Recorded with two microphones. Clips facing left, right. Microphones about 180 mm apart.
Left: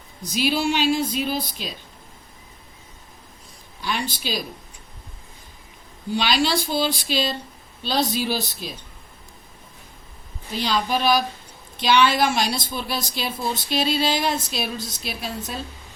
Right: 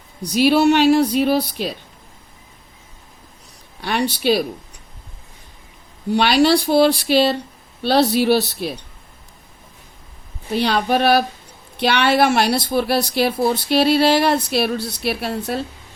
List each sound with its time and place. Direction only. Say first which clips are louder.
0.2 s a woman's voice: right 8 dB; 65° right (ahead or behind)
3.8 s a woman's voice: right 7 dB; 65° right (ahead or behind)
6.1 s a woman's voice: right 7 dB; 65° right (ahead or behind)
10.5 s a woman's voice: right 6 dB; 60° right (ahead or behind)